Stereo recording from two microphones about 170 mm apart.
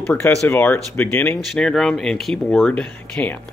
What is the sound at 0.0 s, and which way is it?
Speech, 5° left (ahead or behind).